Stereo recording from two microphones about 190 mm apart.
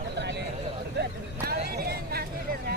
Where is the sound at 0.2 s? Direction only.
65° right (ahead or behind).